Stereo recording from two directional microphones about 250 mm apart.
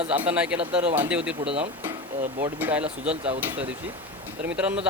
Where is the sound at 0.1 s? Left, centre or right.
Centre.